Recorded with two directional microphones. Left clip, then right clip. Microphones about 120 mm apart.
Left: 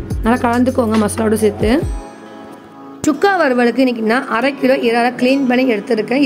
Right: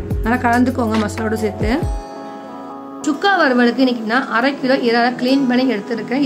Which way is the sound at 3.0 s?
45° left (ahead or behind).